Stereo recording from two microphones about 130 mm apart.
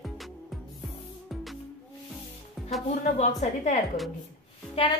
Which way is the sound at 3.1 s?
65° left (ahead or behind).